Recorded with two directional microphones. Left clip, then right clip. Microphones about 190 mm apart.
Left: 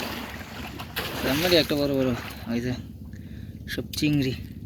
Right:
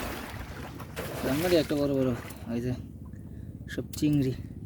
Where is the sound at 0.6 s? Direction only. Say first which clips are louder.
Left 7 dB; 35° left (ahead or behind).